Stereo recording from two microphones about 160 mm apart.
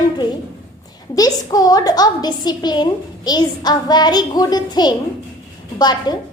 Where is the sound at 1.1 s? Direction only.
25° left (ahead or behind).